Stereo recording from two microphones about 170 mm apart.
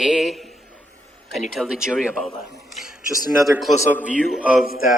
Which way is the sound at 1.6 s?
5° right (ahead or behind).